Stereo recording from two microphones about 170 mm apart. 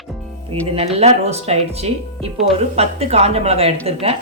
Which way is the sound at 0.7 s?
40° right (ahead or behind).